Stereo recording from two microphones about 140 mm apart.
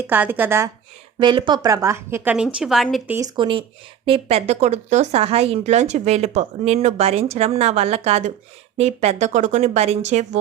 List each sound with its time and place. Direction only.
0.0 s a woman's voice: 15° right (ahead or behind)
1.2 s speech: 35° right (ahead or behind); by 2.3 s 15° right (ahead or behind)
2.3 s a woman's voice: 5° right (ahead or behind)
3.3 s speech: 35° right (ahead or behind); by 10.2 s 50° right (ahead or behind)